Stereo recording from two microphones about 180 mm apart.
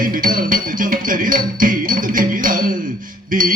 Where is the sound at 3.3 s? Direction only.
50° right (ahead or behind).